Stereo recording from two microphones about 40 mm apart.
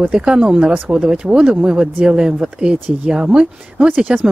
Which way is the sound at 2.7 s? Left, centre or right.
Right.